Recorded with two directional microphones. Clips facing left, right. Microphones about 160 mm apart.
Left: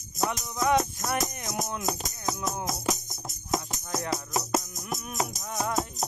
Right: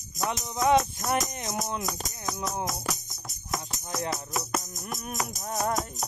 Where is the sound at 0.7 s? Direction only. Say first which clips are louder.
Right 2 dB; 25° right (ahead or behind).